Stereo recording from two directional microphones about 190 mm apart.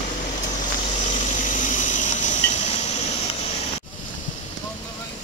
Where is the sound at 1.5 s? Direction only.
40° left (ahead or behind).